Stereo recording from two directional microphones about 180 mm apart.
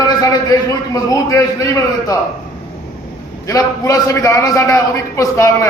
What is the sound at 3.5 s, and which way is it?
A man's voice, 15° left (ahead or behind).